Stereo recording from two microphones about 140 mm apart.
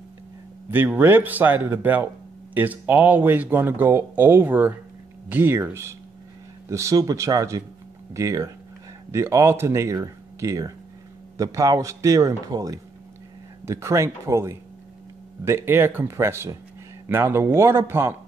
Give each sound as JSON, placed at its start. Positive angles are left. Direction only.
{"t": 0.7, "sound": "speech", "side_deg": -15}